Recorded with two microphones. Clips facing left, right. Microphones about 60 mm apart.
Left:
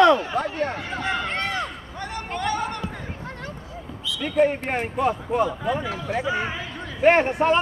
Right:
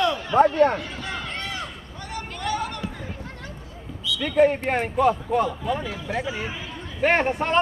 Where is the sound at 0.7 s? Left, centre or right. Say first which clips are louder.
Left 5 dB; left.